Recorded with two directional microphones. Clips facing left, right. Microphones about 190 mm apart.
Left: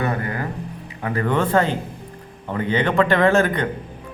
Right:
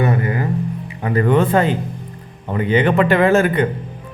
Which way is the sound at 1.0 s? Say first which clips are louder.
Right 5 dB; 20° right (ahead or behind).